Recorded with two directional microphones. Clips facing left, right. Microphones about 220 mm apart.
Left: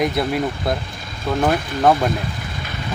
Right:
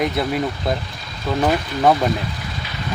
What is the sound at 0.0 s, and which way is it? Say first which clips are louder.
Speech: left 1 dB; centre (ahead or behind).